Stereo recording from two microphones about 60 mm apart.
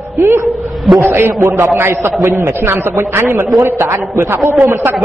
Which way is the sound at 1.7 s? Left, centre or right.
Right.